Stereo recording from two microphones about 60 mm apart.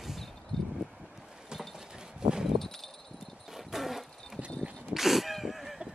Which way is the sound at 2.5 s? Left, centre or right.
Centre.